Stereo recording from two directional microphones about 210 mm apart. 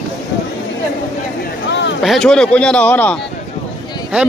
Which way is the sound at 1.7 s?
55° left (ahead or behind).